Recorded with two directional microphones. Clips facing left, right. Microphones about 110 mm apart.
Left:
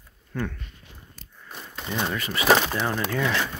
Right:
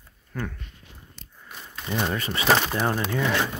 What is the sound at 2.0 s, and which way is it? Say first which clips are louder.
Speech: right 1 dB; 30° right (ahead or behind).